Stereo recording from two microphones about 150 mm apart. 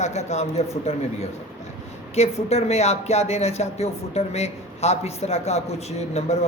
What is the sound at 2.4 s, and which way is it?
Speech, 45° left (ahead or behind).